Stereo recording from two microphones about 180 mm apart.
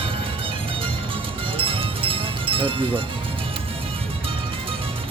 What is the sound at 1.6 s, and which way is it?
Music, 30° right (ahead or behind).